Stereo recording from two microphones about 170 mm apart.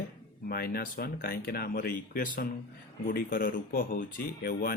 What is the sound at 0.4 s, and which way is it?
Speech, 65° left (ahead or behind).